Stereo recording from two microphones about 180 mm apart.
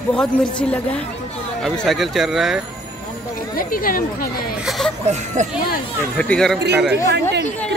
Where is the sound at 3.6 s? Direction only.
50° left (ahead or behind).